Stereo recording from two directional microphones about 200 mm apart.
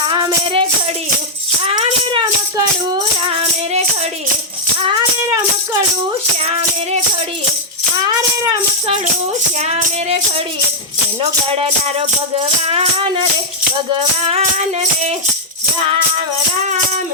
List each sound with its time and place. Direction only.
0.1 s music: 25° right (ahead or behind)
1.6 s music: 25° right (ahead or behind)
9.6 s music: 30° right (ahead or behind)
14.3 s music: 35° right (ahead or behind)